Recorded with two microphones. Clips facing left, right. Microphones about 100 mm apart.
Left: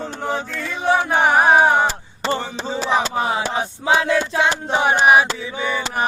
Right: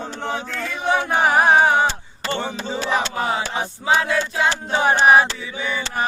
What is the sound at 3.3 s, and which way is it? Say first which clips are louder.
Male singing: left 2 dB; 20° left (ahead or behind).